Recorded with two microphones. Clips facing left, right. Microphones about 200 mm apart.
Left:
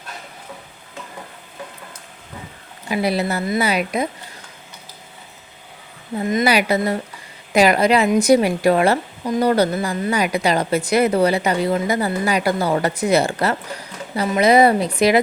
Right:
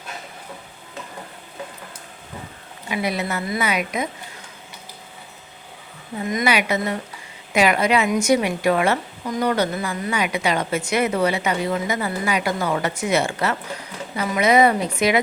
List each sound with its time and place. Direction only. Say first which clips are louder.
2.9 s a woman's voice: left 4 dB; 35° left (ahead or behind)
6.2 s a woman's voice: left 4 dB; 30° left (ahead or behind)